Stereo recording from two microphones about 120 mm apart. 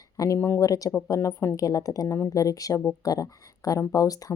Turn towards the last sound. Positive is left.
turn(degrees=30)  # may be behind; listen again after turning